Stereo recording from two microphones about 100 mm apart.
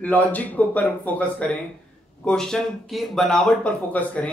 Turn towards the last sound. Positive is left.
turn(degrees=15)  # may be behind; listen again after turning